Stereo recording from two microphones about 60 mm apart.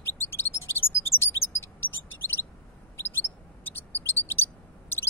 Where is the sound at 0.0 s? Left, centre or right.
Left.